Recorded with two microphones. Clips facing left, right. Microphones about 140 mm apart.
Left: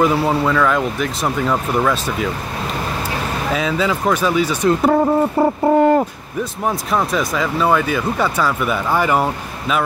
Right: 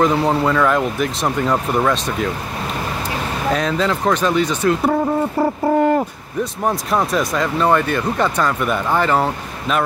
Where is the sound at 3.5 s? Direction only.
5° left (ahead or behind).